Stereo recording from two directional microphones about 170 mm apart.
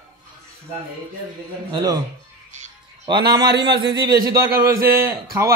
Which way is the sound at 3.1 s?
25° right (ahead or behind).